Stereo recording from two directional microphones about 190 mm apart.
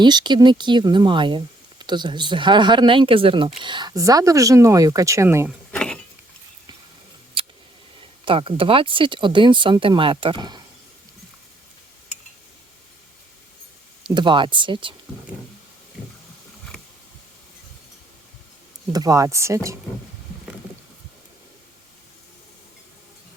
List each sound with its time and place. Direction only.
0.0 s speech: 25° right (ahead or behind)
5.7 s a sound: 5° left (ahead or behind)
7.4 s scissors: 30° right (ahead or behind)
8.2 s speech: 30° right (ahead or behind)
14.1 s speech: 25° right (ahead or behind)
18.9 s speech: 20° right (ahead or behind)